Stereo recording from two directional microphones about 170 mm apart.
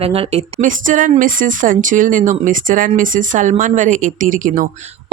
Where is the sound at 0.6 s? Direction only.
50° right (ahead or behind).